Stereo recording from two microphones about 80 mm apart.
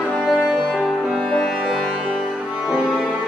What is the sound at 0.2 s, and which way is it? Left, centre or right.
Music, centre.